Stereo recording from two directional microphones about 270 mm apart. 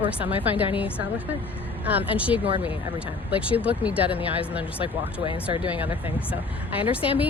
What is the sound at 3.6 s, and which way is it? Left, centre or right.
Speech, centre.